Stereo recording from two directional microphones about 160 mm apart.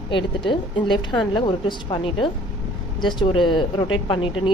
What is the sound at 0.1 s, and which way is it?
Speech, 30° left (ahead or behind).